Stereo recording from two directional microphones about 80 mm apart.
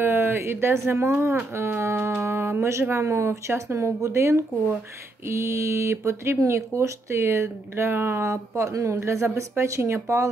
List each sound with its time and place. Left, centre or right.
0.0 s speech: right